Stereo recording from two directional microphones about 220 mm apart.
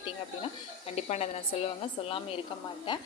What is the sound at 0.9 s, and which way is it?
Speech, 30° left (ahead or behind).